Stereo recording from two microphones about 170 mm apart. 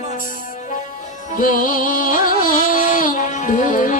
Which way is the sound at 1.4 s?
55° left (ahead or behind).